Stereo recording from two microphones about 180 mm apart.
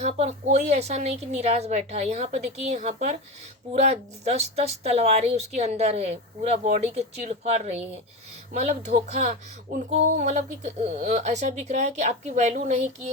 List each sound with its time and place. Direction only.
0.0 s speech: 40° right (ahead or behind)